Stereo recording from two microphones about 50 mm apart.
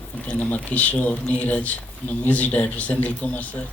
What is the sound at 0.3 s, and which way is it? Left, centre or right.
Speech, left.